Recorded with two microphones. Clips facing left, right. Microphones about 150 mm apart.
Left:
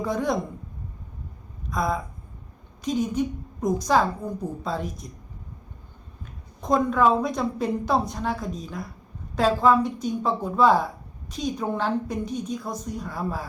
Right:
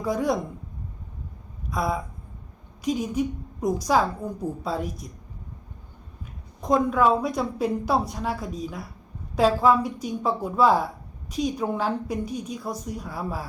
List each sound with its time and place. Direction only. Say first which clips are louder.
0.0 s a woman's voice: right 1 dB; 10° right (ahead or behind)
1.7 s a woman's voice: left 1 dB; 10° right (ahead or behind)
6.6 s a woman's voice: even; 10° right (ahead or behind)